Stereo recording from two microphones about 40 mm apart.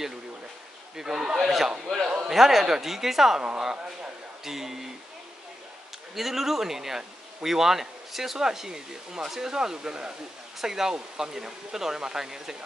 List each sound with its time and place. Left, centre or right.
0.9 s speech: centre
1.3 s speech: centre
3.3 s speech: centre
6.1 s speech: centre